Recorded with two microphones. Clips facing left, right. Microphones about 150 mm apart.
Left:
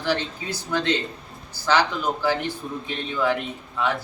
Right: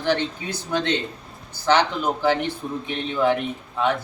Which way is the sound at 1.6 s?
20° right (ahead or behind).